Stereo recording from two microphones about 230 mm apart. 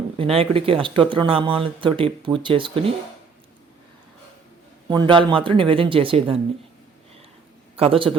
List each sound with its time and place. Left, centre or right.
0.2 s speech: right
4.9 s speech: centre
7.8 s speech: right